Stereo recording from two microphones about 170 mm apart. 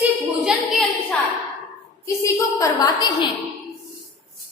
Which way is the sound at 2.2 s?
20° left (ahead or behind).